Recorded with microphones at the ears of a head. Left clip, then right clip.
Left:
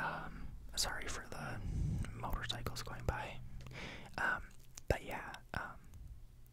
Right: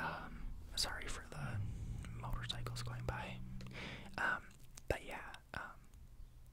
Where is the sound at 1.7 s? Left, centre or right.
Left.